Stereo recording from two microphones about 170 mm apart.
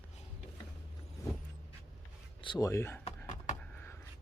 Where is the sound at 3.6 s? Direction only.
10° left (ahead or behind).